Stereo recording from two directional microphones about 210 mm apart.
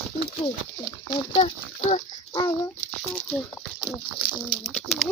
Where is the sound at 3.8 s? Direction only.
10° right (ahead or behind).